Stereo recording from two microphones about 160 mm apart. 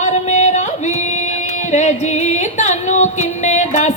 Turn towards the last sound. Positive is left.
turn(degrees=50)  # may be behind; listen again after turning